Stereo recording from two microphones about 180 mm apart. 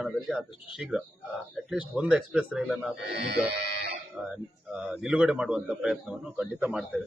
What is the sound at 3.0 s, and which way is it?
Speech, 65° right (ahead or behind).